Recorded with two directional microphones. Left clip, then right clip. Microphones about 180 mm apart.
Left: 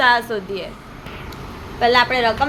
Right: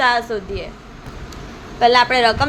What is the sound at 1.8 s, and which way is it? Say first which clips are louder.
Speech: right 2 dB; 10° right (ahead or behind).